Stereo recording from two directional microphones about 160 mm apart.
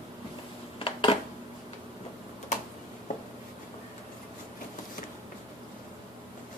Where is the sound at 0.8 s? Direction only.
35° left (ahead or behind).